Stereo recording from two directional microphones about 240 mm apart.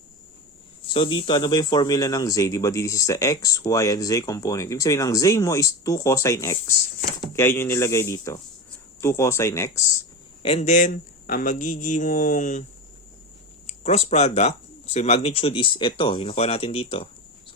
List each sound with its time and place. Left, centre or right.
0.9 s speech: left
10.4 s speech: left
13.7 s speech: left